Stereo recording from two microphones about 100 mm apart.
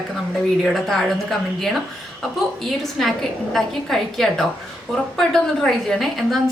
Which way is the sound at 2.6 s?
5° left (ahead or behind).